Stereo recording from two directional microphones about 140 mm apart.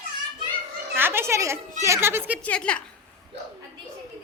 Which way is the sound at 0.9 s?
15° right (ahead or behind).